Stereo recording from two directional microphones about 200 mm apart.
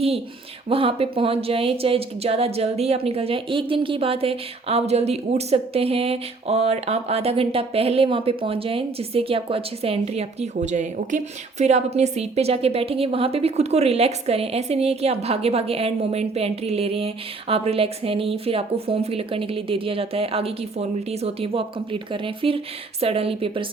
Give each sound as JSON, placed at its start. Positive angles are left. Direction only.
{"t": 0.7, "sound": "speech", "side_deg": -30}